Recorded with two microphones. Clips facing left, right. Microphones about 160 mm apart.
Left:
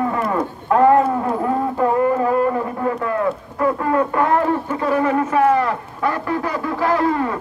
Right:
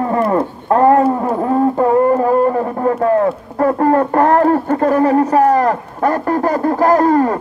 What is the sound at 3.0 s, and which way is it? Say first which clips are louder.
Speech: right 7 dB; 40° right (ahead or behind).